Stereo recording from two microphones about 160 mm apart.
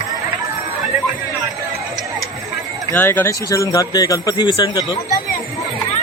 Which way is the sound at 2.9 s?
10° left (ahead or behind).